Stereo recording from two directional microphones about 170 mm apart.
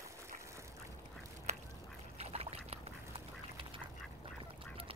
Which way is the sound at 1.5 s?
40° right (ahead or behind).